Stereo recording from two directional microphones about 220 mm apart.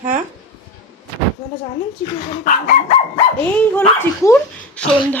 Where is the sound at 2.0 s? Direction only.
35° left (ahead or behind).